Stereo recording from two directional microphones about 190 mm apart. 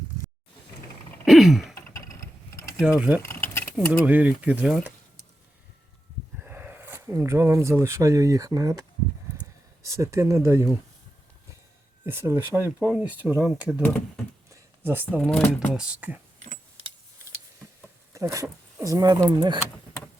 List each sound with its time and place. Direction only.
1.2 s throat clearing: centre (ahead or behind)
1.9 s vehicle: 15° left (ahead or behind)
2.8 s speech: 5° right (ahead or behind)
3.2 s keys jangling: 10° left (ahead or behind)
4.0 s speech: 10° right (ahead or behind)
6.4 s speech: 10° right (ahead or behind)
12.0 s speech: 10° right (ahead or behind)
14.5 s a sound: 10° right (ahead or behind)
15.3 s speech: 5° left (ahead or behind)
15.8 s speech: 5° right (ahead or behind)
18.1 s speech: 15° right (ahead or behind)